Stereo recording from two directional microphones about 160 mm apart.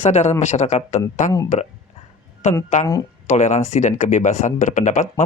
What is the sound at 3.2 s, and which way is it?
Speech, 45° left (ahead or behind).